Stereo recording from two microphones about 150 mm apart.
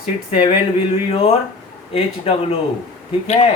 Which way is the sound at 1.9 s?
40° left (ahead or behind).